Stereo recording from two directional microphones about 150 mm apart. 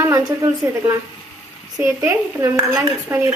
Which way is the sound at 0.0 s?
20° right (ahead or behind).